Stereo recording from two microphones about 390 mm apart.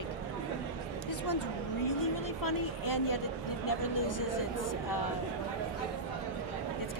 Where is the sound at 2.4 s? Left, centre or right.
Left.